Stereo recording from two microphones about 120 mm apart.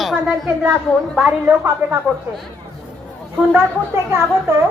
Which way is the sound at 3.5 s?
20° right (ahead or behind).